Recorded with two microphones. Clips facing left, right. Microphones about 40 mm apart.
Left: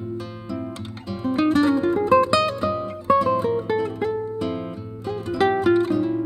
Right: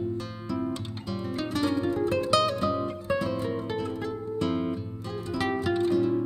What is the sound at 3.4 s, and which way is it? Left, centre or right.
Music, left.